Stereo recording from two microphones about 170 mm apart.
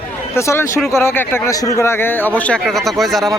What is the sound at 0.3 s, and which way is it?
Speech, 15° left (ahead or behind).